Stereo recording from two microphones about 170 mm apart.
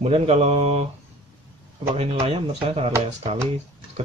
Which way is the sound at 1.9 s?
35° right (ahead or behind).